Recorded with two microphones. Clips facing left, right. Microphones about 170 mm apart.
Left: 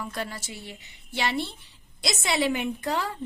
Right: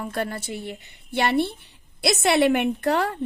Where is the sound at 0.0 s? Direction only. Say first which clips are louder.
Right 6 dB; 55° right (ahead or behind).